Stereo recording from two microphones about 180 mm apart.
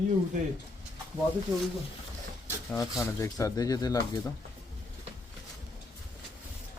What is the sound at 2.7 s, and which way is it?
Speech, centre (ahead or behind).